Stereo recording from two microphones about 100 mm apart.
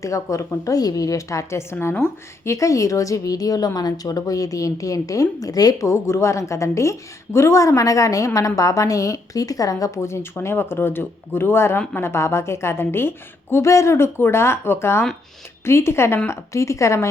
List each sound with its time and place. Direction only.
0.0 s a woman's voice: 30° left (ahead or behind)